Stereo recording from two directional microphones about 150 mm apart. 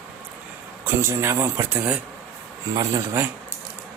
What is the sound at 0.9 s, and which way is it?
Speech, 15° right (ahead or behind).